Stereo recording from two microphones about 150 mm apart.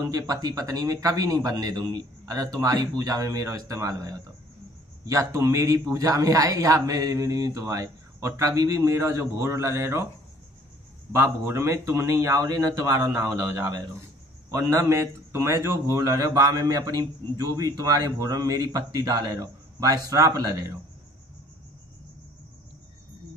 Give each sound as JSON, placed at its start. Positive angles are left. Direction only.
{"t": 0.0, "sound": "a man's voice", "side_deg": -25}
{"t": 11.1, "sound": "a man's voice", "side_deg": -15}